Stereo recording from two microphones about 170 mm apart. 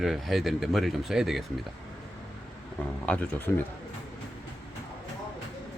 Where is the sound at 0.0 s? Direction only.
Centre (ahead or behind).